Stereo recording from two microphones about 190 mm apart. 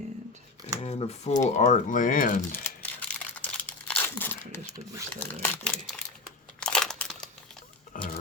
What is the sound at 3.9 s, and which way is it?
Tearing, 10° left (ahead or behind).